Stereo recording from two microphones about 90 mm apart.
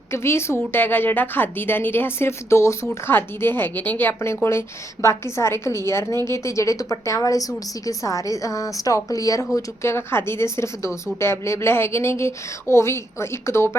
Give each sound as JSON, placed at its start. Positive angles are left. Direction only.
{"t": 0.1, "sound": "a woman's voice", "side_deg": 30}